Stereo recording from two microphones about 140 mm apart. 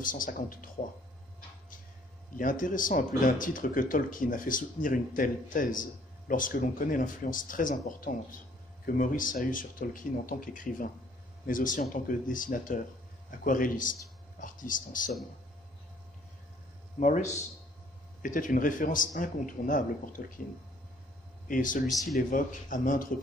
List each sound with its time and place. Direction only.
0.0 s speech: 75° left (ahead or behind)
2.3 s speech: 70° left (ahead or behind)
17.0 s speech: 60° left (ahead or behind)
18.2 s speech: 70° left (ahead or behind)
21.5 s speech: 75° left (ahead or behind)